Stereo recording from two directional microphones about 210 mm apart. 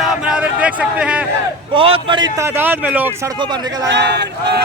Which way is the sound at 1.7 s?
25° right (ahead or behind).